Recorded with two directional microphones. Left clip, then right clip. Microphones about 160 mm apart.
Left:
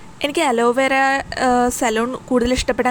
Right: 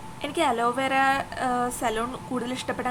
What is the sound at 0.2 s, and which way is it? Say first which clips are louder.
A woman's voice: left 7 dB; 50° left (ahead or behind).